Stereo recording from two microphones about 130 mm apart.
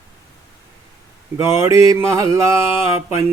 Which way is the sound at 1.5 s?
20° right (ahead or behind).